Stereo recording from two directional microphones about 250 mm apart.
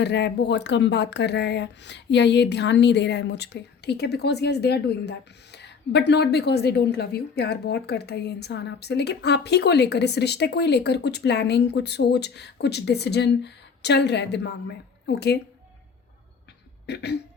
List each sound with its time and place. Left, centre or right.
0.0 s speech: left
16.8 s cough: left